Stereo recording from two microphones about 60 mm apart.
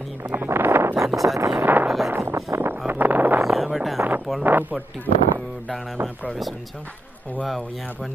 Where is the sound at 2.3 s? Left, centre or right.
Right.